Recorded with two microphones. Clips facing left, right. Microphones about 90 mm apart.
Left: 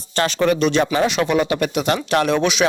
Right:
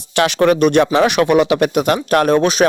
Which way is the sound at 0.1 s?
70° right (ahead or behind).